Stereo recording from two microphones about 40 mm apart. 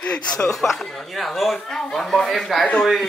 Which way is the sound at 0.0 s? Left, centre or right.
Left.